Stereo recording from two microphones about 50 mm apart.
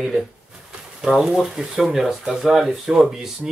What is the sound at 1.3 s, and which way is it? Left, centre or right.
Speech, centre.